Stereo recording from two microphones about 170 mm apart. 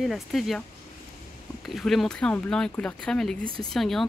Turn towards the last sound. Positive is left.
turn(degrees=0)  # may be behind; listen again after turning